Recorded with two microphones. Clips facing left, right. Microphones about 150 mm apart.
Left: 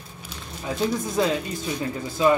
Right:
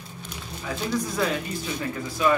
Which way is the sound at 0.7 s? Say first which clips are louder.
Left 3 dB; 25° left (ahead or behind).